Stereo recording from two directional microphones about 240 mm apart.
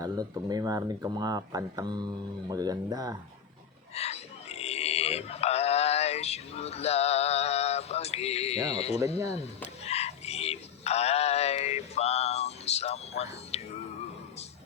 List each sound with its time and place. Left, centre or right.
0.0 s speech: centre
3.9 s grunt: left
8.7 s speech: left
9.8 s synthetic singing: left